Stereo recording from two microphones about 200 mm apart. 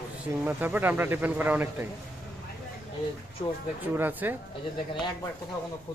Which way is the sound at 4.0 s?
10° right (ahead or behind).